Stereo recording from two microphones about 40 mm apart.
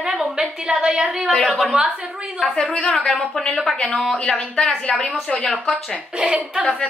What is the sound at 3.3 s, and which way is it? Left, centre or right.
Speech, centre.